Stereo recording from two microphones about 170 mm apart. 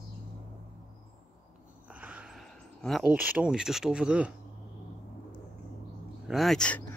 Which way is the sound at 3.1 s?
10° right (ahead or behind).